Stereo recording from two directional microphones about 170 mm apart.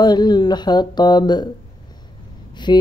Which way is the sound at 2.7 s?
30° left (ahead or behind).